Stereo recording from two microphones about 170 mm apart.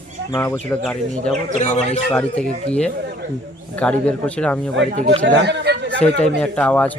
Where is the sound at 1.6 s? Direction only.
45° left (ahead or behind).